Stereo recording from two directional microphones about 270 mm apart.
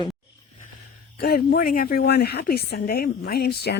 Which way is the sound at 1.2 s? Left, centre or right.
Left.